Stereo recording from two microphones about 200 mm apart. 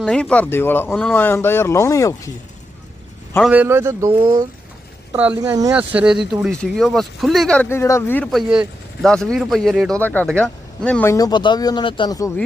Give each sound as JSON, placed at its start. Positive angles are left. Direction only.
{"t": 0.0, "sound": "speech", "side_deg": 5}
{"t": 3.5, "sound": "speech", "side_deg": -10}
{"t": 5.1, "sound": "speech", "side_deg": -5}